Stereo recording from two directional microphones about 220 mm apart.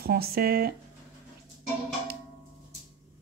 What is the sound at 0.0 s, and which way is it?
Speech, 45° right (ahead or behind).